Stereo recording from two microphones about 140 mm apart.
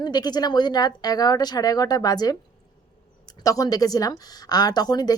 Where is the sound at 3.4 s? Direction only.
25° left (ahead or behind).